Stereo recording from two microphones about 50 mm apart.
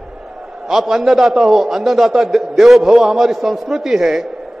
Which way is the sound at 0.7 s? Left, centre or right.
Centre.